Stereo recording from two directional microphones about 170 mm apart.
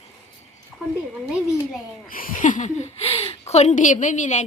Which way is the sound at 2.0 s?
55° left (ahead or behind).